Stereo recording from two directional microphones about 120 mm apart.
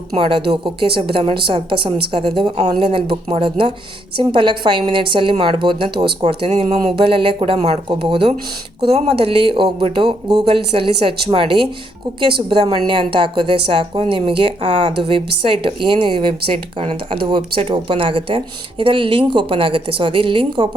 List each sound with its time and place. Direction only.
0.2 s a woman's voice: 45° right (ahead or behind)